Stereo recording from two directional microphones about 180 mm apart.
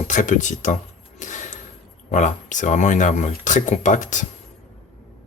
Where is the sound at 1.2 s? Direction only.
45° left (ahead or behind).